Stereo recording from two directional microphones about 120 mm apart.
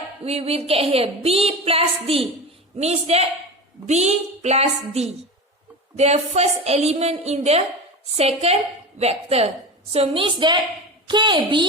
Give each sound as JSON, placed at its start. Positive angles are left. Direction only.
{"t": 0.3, "sound": "a woman's voice", "side_deg": -55}
{"t": 2.7, "sound": "a woman's voice", "side_deg": -65}